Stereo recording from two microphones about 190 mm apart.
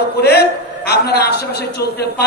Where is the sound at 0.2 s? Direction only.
55° left (ahead or behind).